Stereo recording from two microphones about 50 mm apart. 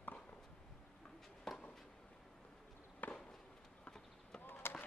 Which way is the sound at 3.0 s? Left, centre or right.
Left.